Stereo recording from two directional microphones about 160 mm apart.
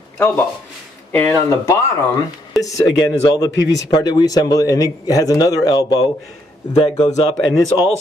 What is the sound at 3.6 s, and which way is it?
Speech, 90° left.